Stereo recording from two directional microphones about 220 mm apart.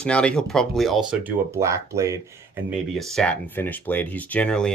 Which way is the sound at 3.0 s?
Centre (ahead or behind).